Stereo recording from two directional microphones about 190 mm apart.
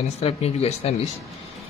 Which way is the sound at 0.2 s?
30° left (ahead or behind).